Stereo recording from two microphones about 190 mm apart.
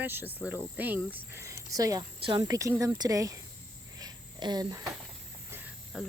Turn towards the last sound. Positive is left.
turn(degrees=0)  # may be behind; listen again after turning